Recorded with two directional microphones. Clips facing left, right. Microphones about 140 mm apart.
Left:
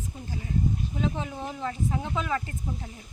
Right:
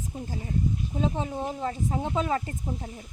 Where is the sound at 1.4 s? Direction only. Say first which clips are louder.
Right 1 dB; 35° right (ahead or behind).